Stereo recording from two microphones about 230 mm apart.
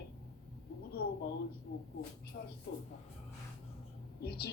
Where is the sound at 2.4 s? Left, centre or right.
Left.